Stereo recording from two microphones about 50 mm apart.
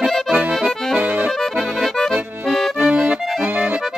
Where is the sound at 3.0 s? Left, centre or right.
Right.